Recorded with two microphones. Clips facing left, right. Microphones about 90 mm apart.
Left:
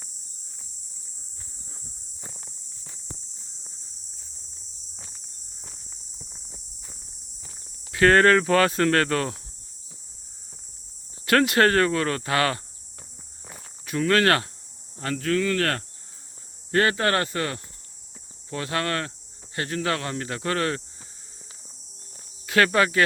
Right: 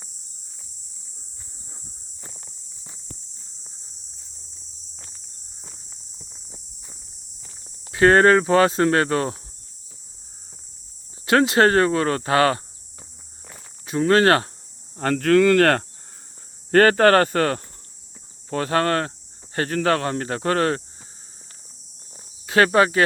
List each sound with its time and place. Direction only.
2.2 s walk: centre (ahead or behind)
5.6 s walk: centre (ahead or behind)
7.9 s speech: 25° right (ahead or behind)
11.3 s speech: 25° right (ahead or behind)
13.8 s speech: 30° right (ahead or behind)
14.9 s speech: 55° right (ahead or behind); by 15.8 s 70° right (ahead or behind)
16.7 s speech: 50° right (ahead or behind)
22.4 s speech: 25° right (ahead or behind)